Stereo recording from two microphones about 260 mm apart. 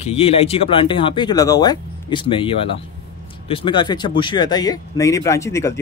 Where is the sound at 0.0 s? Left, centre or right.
Left.